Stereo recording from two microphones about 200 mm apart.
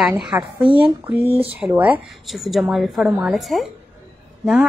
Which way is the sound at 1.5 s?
5° right (ahead or behind).